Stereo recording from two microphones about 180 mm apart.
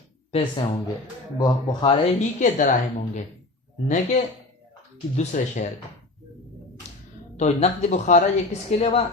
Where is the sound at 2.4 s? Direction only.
50° left (ahead or behind).